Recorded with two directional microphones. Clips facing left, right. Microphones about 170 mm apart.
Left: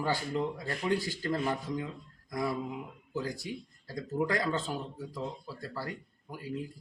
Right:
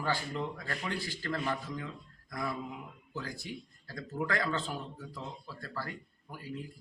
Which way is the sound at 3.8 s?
20° left (ahead or behind).